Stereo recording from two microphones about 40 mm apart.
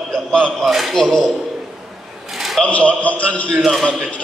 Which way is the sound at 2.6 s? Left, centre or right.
Left.